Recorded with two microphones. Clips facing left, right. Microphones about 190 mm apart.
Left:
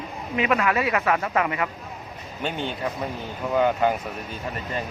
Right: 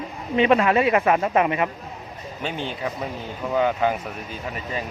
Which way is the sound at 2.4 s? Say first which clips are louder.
Even; centre (ahead or behind).